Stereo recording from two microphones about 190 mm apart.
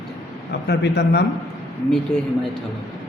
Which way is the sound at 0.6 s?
60° left (ahead or behind).